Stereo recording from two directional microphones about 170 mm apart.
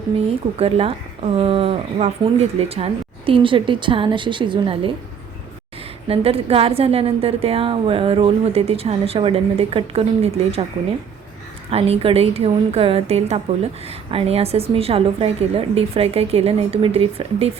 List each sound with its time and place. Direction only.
0.5 s a woman's voice: 35° right (ahead or behind)
6.1 s a woman's voice: 35° right (ahead or behind)
11.7 s a woman's voice: 35° right (ahead or behind)